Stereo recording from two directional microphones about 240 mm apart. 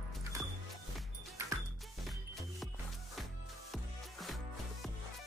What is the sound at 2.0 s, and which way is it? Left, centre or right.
Music, centre.